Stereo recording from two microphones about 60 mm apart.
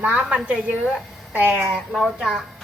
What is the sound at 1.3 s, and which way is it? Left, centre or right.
Speech, right.